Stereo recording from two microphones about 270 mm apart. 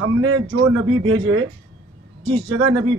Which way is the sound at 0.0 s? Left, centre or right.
Right.